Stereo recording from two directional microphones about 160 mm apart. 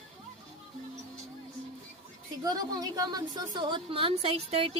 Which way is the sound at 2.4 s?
25° right (ahead or behind).